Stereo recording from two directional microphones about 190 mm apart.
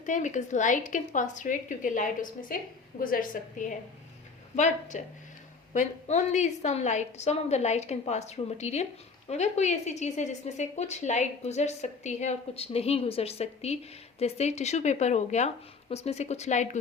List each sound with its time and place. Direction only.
0.0 s a woman's voice: 40° left (ahead or behind)